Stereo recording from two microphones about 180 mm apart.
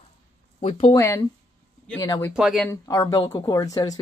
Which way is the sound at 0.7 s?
35° left (ahead or behind).